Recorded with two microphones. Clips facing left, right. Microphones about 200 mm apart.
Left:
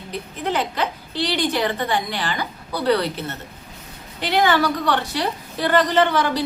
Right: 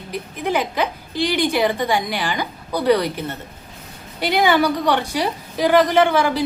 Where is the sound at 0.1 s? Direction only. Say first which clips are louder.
Right 3 dB; 10° right (ahead or behind).